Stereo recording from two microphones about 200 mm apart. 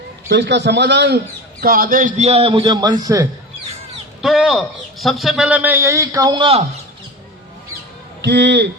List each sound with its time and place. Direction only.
0.3 s a man's voice: 60° right (ahead or behind)
1.6 s a man's voice: 45° right (ahead or behind); by 3.2 s 20° right (ahead or behind)
4.2 s a man's voice: centre (ahead or behind); by 6.6 s 25° right (ahead or behind)
8.2 s a man's voice: 60° right (ahead or behind)